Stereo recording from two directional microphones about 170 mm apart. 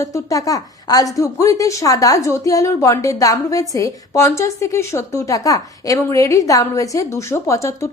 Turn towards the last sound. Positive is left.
turn(degrees=15)  # may be behind; listen again after turning